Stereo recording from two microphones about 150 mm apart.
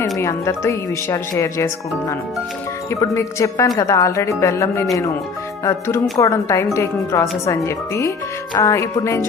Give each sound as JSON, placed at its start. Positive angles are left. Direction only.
{"t": 0.0, "sound": "speech", "side_deg": 20}
{"t": 2.9, "sound": "speech", "side_deg": 20}